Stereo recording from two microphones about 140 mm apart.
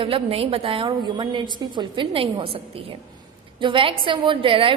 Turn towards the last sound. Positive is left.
turn(degrees=-40)  # may be behind; listen again after turning